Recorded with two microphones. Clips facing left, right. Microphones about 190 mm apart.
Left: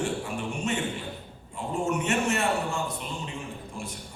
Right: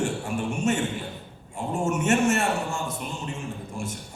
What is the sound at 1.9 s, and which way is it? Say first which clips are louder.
A man's voice: right 5 dB; 45° right (ahead or behind).